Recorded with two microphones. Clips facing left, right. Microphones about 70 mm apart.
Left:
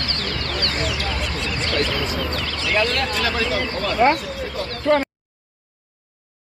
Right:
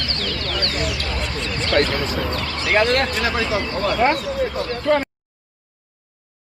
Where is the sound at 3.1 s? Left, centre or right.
Right.